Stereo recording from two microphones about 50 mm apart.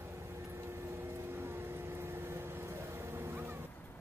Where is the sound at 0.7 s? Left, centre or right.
Right.